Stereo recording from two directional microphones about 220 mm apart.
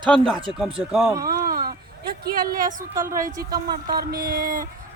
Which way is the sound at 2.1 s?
45° right (ahead or behind).